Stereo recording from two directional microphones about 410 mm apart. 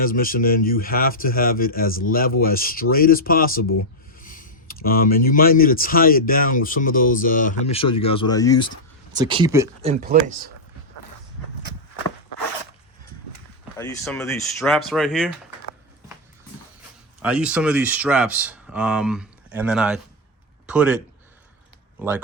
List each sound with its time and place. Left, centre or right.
0.0 s speech: left
9.1 s speech: centre
13.7 s speech: centre
17.2 s speech: centre